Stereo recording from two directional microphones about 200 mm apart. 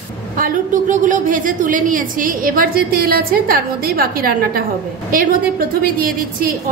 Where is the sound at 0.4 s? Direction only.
40° right (ahead or behind).